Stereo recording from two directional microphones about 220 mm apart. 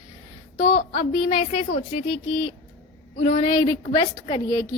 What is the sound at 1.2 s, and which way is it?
A woman's voice, 25° left (ahead or behind).